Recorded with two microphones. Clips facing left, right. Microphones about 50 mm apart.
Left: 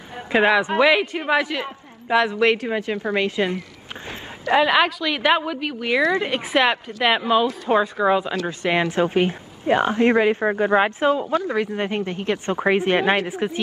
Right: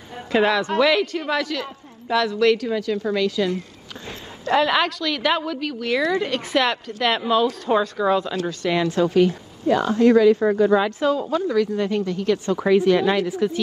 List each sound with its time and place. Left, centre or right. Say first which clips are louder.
0.1 s a woman's voice: left 2 dB; left
4.5 s a woman's voice: left 2 dB; centre
5.1 s a woman's voice: left 2 dB; left
10.4 s speech: right 1 dB; left
11.0 s speech: left 1 dB; left
13.3 s a woman's voice: right 3 dB; left